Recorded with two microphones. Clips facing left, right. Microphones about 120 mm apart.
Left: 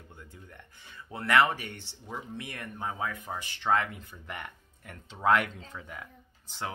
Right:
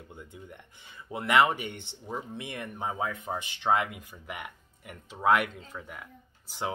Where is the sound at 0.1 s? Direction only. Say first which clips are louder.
Right 5 dB; 20° right (ahead or behind).